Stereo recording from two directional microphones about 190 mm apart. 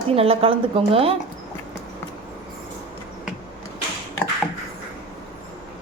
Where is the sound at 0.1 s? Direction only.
30° right (ahead or behind).